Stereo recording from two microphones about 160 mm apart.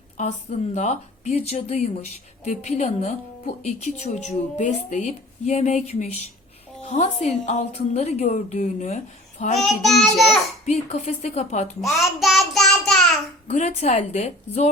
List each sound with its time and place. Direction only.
0.2 s speech: 45° left (ahead or behind)
9.6 s child singing: centre (ahead or behind)
10.7 s speech: 45° left (ahead or behind)
11.8 s a child's voice: centre (ahead or behind)
13.5 s speech: 45° left (ahead or behind)